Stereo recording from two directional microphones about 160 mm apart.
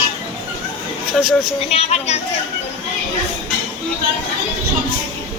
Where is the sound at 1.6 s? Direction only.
40° left (ahead or behind).